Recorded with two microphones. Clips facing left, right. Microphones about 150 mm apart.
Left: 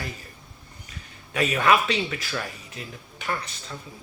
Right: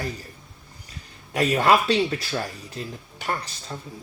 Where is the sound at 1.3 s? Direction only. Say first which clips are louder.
Right 2 dB; 30° right (ahead or behind).